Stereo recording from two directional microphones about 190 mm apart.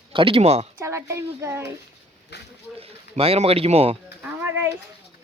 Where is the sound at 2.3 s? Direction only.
65° left (ahead or behind).